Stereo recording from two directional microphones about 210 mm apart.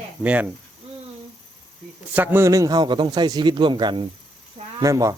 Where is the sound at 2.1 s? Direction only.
10° right (ahead or behind).